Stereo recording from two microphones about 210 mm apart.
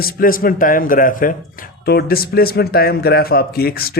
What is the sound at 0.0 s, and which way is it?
Speech, 45° left (ahead or behind).